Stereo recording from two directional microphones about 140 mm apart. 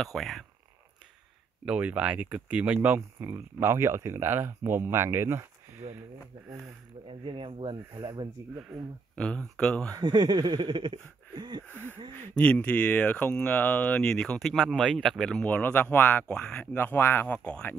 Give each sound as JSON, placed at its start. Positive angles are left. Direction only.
{"t": 0.0, "sound": "speech", "side_deg": 0}
{"t": 1.7, "sound": "speech", "side_deg": -10}
{"t": 7.1, "sound": "speech", "side_deg": -35}
{"t": 8.5, "sound": "speech", "side_deg": -5}
{"t": 9.1, "sound": "speech", "side_deg": 5}
{"t": 9.8, "sound": "speech", "side_deg": -25}
{"t": 12.4, "sound": "speech", "side_deg": 10}